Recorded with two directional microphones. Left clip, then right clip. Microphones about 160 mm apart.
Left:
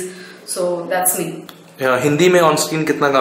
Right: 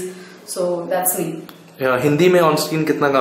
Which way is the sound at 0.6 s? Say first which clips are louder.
Left 1 dB; 10° right (ahead or behind).